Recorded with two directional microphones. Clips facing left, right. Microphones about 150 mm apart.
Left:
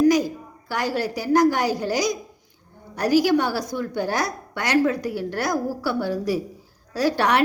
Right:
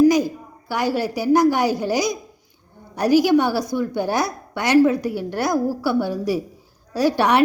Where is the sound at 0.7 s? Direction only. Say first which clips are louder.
Right 3 dB; 10° right (ahead or behind).